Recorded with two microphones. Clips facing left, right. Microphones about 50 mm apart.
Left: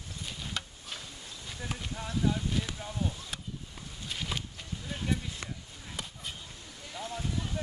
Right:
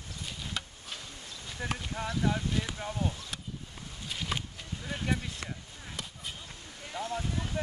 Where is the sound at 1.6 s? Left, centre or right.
Right.